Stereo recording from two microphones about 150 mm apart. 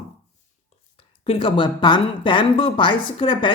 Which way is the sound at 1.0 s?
40° left (ahead or behind).